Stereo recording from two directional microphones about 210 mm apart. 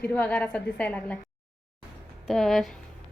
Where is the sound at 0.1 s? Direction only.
5° left (ahead or behind).